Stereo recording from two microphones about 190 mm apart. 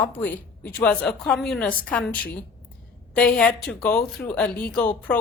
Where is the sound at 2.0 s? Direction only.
55° left (ahead or behind).